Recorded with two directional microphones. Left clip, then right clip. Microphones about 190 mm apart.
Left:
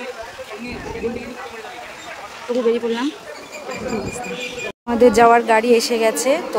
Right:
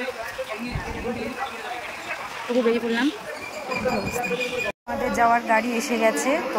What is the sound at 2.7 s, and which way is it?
Speech, 10° left (ahead or behind).